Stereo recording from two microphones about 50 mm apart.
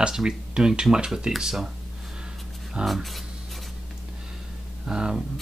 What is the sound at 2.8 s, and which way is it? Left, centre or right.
Speech, centre.